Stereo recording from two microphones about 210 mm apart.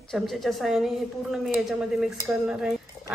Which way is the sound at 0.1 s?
Centre (ahead or behind).